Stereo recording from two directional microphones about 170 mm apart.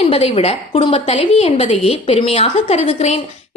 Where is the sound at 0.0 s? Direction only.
35° left (ahead or behind).